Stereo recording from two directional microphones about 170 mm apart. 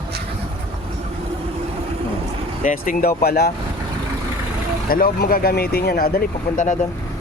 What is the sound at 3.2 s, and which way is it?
Speech, 65° left (ahead or behind).